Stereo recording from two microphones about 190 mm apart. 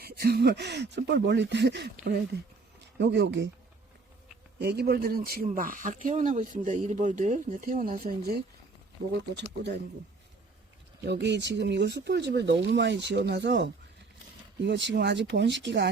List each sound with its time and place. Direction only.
0.0 s speech: 55° right (ahead or behind)
4.6 s speech: 55° right (ahead or behind)
9.3 s speech: 65° right (ahead or behind)
11.0 s speech: 65° right (ahead or behind)